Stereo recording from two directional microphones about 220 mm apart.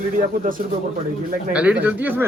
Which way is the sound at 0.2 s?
40° right (ahead or behind).